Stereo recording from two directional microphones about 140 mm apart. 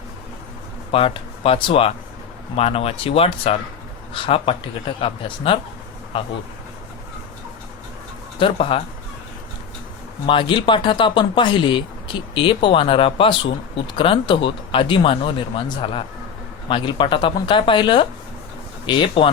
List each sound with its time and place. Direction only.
0.9 s speech: 40° left (ahead or behind)
8.4 s speech: 40° left (ahead or behind)
10.2 s speech: 35° left (ahead or behind)